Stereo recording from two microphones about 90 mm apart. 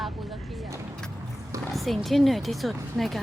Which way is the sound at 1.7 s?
Centre (ahead or behind).